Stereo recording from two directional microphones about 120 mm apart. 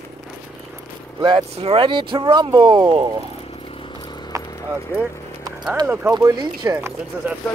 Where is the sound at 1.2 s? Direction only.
50° right (ahead or behind).